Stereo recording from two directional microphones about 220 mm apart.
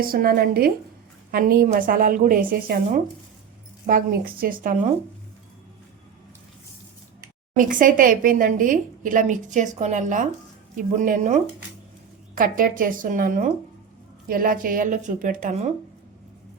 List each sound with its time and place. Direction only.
0.0 s a woman's voice: 40° right (ahead or behind)
7.5 s a woman's voice: 40° right (ahead or behind)
12.4 s a woman's voice: 40° right (ahead or behind)